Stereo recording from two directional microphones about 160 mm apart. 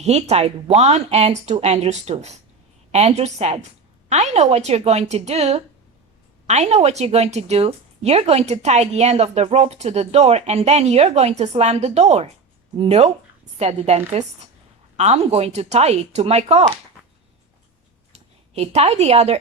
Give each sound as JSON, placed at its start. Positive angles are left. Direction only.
{"t": 0.0, "sound": "a woman's voice", "side_deg": -40}
{"t": 18.1, "sound": "speech", "side_deg": -40}